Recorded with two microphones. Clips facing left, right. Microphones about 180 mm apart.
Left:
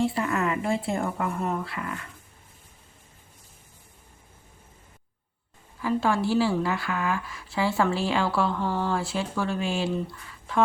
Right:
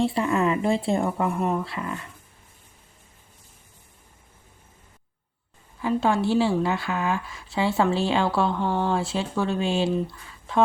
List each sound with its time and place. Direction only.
0.0 s a woman's voice: 25° right (ahead or behind)
5.8 s a woman's voice: 25° right (ahead or behind)